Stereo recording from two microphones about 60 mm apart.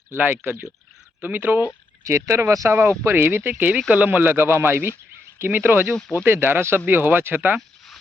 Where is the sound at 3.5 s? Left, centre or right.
Right.